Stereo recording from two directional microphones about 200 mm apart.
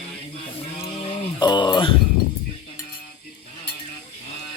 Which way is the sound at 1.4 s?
20° left (ahead or behind).